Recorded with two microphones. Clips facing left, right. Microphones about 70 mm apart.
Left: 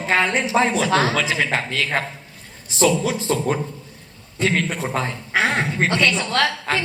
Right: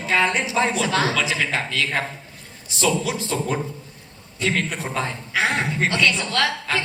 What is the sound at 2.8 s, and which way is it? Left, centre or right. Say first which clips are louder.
Speech: left 4 dB; left.